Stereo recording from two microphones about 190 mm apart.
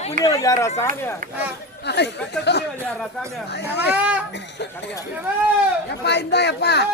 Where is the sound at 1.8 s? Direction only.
65° left (ahead or behind).